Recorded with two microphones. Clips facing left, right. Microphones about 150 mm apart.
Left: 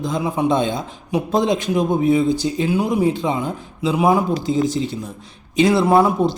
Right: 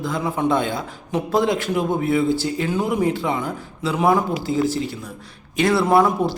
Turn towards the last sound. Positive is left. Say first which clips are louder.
# left 2 dB
turn(degrees=15)  # may be behind; listen again after turning